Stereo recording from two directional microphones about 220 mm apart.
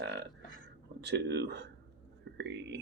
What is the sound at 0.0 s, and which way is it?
Burping, 50° right (ahead or behind).